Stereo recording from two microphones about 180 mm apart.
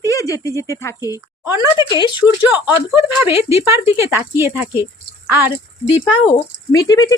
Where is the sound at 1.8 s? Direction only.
25° left (ahead or behind).